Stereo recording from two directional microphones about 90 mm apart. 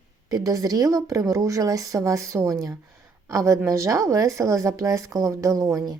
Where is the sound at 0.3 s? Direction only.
40° right (ahead or behind).